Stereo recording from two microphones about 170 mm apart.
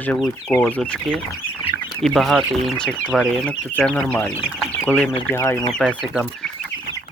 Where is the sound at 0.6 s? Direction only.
10° left (ahead or behind).